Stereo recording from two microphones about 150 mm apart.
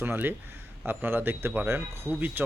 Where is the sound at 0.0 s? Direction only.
15° right (ahead or behind).